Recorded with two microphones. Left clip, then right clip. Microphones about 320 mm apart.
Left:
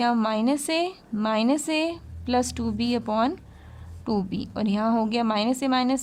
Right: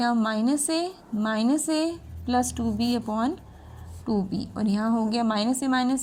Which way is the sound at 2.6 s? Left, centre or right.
Left.